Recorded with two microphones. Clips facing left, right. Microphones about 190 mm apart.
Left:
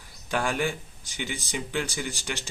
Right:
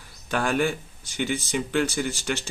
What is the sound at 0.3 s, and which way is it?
Speech, 15° left (ahead or behind).